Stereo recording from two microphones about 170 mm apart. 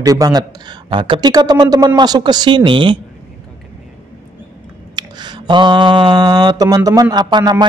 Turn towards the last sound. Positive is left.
turn(degrees=-25)  # may be behind; listen again after turning